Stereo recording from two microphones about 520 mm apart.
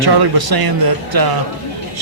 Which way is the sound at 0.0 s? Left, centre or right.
Right.